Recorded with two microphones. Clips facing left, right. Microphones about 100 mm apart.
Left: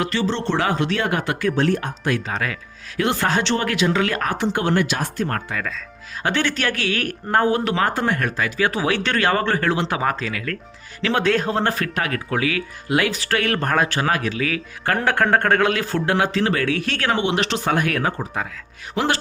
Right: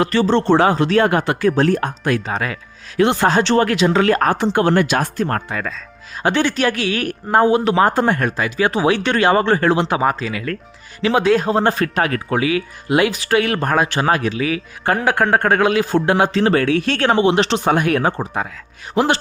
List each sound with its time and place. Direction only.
0.1 s speech: 50° right (ahead or behind)
0.6 s speech: 35° right (ahead or behind)
1.2 s speech: 30° right (ahead or behind); by 2.2 s 50° right (ahead or behind)
2.2 s speech: 25° right (ahead or behind)
3.4 s speech: 40° right (ahead or behind)
5.5 s speech: 30° right (ahead or behind)
6.2 s speech: 20° right (ahead or behind)
9.8 s speech: 15° right (ahead or behind); by 12.4 s 30° right (ahead or behind)
12.4 s speech: 20° right (ahead or behind)
13.9 s speech: 25° right (ahead or behind)